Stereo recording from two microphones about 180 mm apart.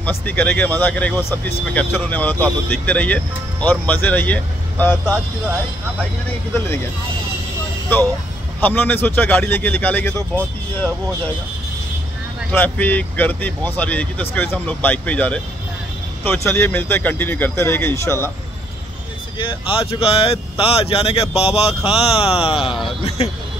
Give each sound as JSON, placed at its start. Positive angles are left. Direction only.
{"t": 0.0, "sound": "speech", "side_deg": 10}
{"t": 8.5, "sound": "speech", "side_deg": 10}
{"t": 12.4, "sound": "speech", "side_deg": 10}
{"t": 19.3, "sound": "speech", "side_deg": 30}